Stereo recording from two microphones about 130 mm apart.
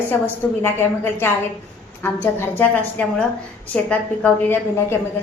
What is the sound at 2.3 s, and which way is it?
A woman's voice, 15° left (ahead or behind).